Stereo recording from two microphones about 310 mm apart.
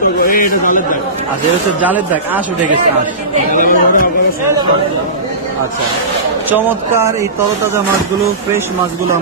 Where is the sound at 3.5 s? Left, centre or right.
Left.